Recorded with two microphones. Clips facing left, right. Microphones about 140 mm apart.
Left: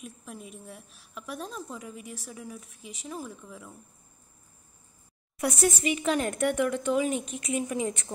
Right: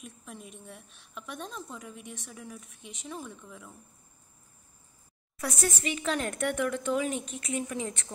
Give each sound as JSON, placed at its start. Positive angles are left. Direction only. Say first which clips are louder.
{"t": 0.0, "sound": "a woman's voice", "louder": "left 3 dB", "side_deg": 0}
{"t": 5.4, "sound": "a woman's voice", "louder": "left 5 dB", "side_deg": 15}